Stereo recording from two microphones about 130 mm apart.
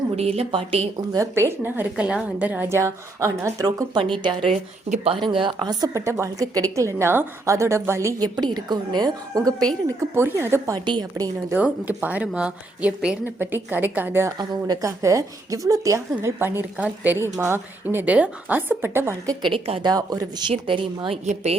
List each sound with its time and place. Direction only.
0.2 s a woman's voice: 50° right (ahead or behind)
1.1 s a woman's voice: 20° right (ahead or behind)
4.0 s a woman's voice: 40° right (ahead or behind); by 10.8 s 20° right (ahead or behind)
10.8 s a woman's voice: 35° right (ahead or behind)
11.5 s a woman's voice: 10° right (ahead or behind); by 19.5 s 25° right (ahead or behind)
19.5 s a woman's voice: 45° right (ahead or behind)
19.8 s a woman's voice: 30° right (ahead or behind)
20.5 s a woman's voice: 45° right (ahead or behind)